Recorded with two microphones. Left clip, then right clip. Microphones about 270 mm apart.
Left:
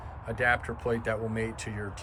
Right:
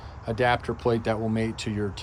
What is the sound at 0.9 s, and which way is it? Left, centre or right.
Speech, right.